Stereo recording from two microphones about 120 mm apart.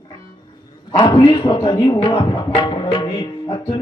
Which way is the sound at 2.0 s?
45° left (ahead or behind).